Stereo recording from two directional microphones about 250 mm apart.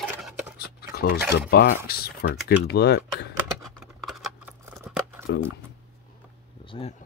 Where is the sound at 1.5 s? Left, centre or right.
Left.